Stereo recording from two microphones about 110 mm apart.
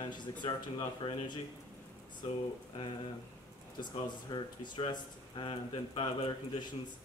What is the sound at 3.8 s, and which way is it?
A man's voice, 45° left (ahead or behind).